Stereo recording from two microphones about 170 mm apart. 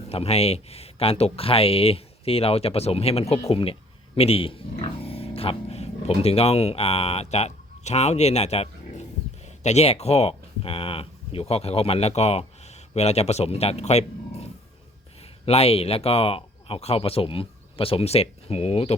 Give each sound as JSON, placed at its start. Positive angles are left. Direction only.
{"t": 0.1, "sound": "speech", "side_deg": 35}